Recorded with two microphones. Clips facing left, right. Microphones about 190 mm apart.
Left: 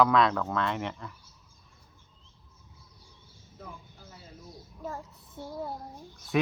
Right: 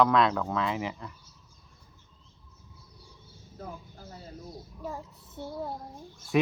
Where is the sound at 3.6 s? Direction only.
40° right (ahead or behind).